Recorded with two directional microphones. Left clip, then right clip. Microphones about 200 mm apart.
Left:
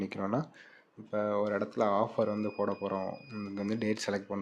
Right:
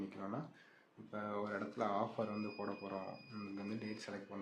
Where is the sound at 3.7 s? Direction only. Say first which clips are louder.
Left 18 dB; 45° left (ahead or behind).